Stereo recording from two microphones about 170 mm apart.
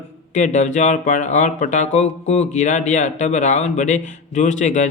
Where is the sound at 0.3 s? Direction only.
45° left (ahead or behind).